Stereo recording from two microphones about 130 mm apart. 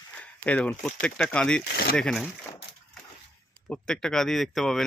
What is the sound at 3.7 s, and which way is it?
Speech, 5° left (ahead or behind).